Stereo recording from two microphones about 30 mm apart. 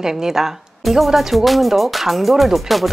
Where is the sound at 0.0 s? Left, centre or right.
Centre.